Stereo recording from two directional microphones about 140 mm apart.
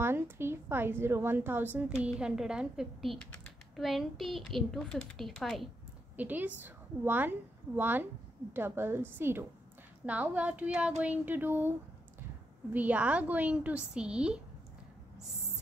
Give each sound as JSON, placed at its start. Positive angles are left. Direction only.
{"t": 0.0, "sound": "a woman's voice", "side_deg": -15}
{"t": 6.1, "sound": "a woman's voice", "side_deg": -10}
{"t": 12.7, "sound": "a woman's voice", "side_deg": -10}